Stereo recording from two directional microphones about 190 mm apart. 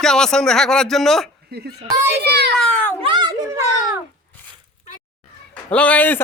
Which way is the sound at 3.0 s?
25° right (ahead or behind).